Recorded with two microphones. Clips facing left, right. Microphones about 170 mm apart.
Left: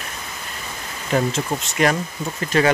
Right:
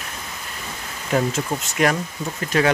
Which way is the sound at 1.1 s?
Centre (ahead or behind).